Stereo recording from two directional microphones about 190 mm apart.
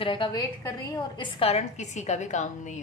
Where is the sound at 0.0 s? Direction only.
25° left (ahead or behind).